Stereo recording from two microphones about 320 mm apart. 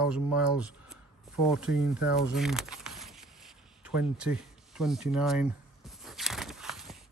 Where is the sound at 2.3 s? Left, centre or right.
Centre.